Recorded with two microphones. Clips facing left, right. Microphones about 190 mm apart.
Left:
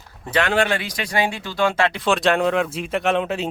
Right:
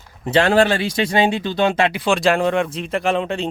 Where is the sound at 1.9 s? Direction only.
Centre (ahead or behind).